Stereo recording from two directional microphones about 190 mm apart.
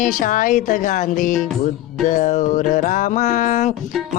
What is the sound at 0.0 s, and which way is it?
Speech, 45° left (ahead or behind).